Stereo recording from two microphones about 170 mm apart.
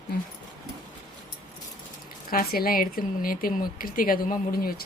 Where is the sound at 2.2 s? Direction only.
60° left (ahead or behind).